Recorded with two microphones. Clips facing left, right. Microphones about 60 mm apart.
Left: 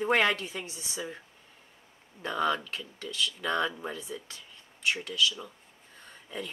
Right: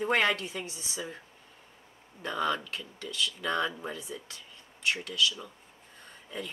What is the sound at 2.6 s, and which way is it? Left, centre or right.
Speech, centre.